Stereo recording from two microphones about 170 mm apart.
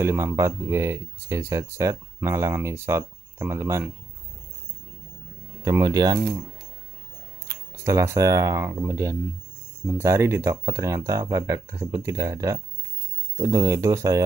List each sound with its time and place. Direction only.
0.0 s speech: 15° right (ahead or behind)
5.6 s speech: 20° right (ahead or behind)
7.4 s speech: 15° right (ahead or behind)